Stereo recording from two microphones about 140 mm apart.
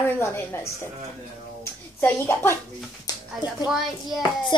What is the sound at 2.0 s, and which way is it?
Speech, 15° left (ahead or behind).